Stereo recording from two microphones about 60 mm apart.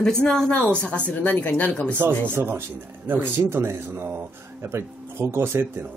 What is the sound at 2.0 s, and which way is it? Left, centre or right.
Speech, right.